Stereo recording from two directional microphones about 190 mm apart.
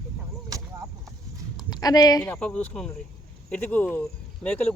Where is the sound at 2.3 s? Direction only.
5° left (ahead or behind).